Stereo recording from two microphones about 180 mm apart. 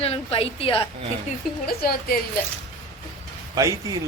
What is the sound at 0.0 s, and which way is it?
Speech, 30° left (ahead or behind).